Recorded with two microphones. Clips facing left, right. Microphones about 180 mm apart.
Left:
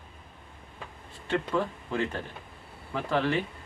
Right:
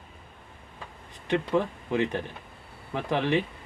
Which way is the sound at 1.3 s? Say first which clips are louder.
Right 3 dB; 20° right (ahead or behind).